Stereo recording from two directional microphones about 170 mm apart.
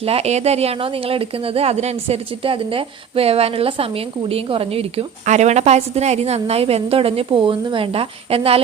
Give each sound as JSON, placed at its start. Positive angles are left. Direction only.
{"t": 0.0, "sound": "a woman's voice", "side_deg": -35}